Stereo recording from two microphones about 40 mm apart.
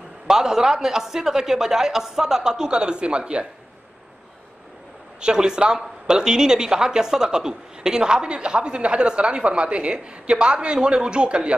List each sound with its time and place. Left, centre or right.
0.3 s a man's voice: centre
5.2 s speech: centre